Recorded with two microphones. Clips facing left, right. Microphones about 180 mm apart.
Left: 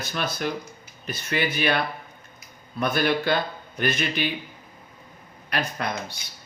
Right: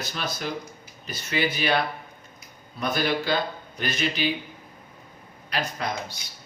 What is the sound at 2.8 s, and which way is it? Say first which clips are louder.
Speech: left 2 dB; 55° left (ahead or behind).